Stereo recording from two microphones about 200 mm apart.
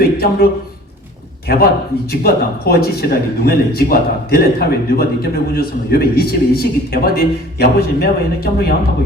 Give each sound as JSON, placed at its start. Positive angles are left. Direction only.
{"t": 0.0, "sound": "speech", "side_deg": 50}
{"t": 1.5, "sound": "speech", "side_deg": 50}